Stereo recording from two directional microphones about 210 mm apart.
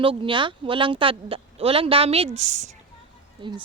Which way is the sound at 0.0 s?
25° right (ahead or behind).